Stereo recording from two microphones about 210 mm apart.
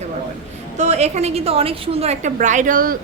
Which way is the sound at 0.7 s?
35° right (ahead or behind).